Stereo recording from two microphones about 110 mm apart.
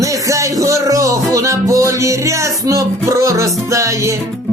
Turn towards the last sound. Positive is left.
turn(degrees=-30)  # may be behind; listen again after turning